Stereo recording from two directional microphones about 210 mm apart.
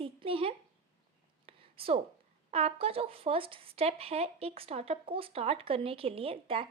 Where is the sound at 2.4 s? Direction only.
30° right (ahead or behind).